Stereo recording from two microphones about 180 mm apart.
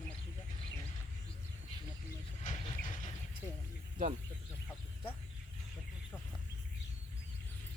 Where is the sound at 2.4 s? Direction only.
40° left (ahead or behind).